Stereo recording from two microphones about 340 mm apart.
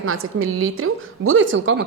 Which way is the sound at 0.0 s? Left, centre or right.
Right.